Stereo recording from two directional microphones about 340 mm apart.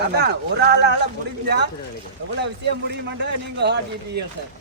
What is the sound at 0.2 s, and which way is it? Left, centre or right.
A man's voice, right.